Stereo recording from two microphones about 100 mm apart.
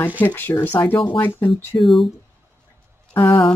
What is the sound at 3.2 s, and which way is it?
Speech, 65° left (ahead or behind).